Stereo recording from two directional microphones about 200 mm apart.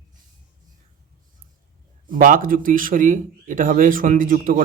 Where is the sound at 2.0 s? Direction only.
45° right (ahead or behind).